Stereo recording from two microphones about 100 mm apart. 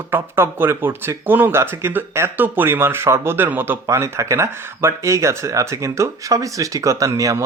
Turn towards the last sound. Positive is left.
turn(degrees=-30)  # may be behind; listen again after turning